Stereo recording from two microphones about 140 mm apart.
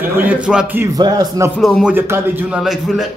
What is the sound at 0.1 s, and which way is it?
Speech, 10° right (ahead or behind).